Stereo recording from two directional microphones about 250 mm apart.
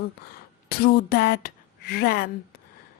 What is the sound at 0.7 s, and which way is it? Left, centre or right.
Speech, left.